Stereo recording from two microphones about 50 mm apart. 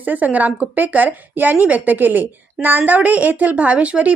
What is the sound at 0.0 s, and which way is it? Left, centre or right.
A woman's voice, right.